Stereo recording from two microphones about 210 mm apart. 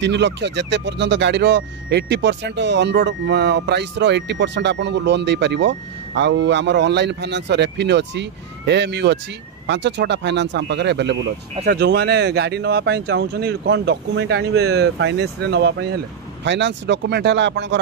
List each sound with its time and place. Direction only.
0.0 s speech: 55° right (ahead or behind)